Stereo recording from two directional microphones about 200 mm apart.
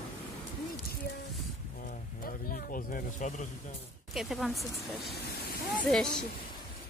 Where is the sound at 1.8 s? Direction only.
40° left (ahead or behind).